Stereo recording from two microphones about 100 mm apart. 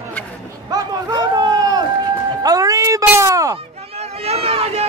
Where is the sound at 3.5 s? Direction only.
85° right.